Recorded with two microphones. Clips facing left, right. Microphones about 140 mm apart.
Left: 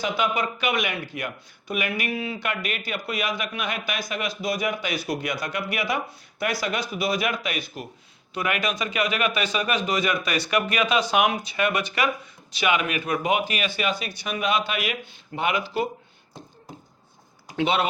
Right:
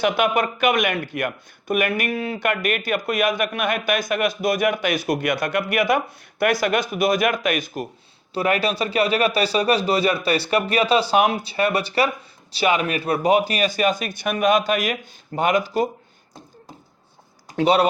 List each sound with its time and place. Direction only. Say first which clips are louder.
0.0 s speech: right 5 dB; 60° right (ahead or behind)
8.3 s speech: right 6 dB; 35° right (ahead or behind)
17.5 s speech: right 6 dB; 40° right (ahead or behind)